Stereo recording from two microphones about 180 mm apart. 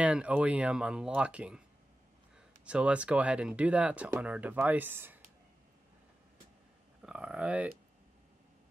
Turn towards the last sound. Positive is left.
turn(degrees=-10)  # may be behind; listen again after turning